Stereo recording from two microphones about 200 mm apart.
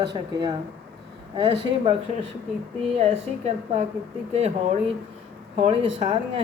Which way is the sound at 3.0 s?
35° right (ahead or behind).